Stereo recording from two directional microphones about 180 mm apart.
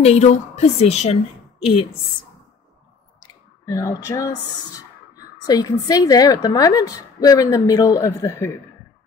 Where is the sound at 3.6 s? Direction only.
15° left (ahead or behind).